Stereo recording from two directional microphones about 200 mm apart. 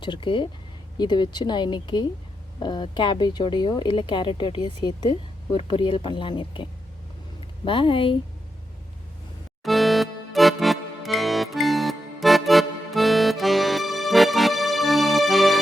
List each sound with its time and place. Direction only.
0.0 s speech: 25° left (ahead or behind)
9.6 s music: centre (ahead or behind)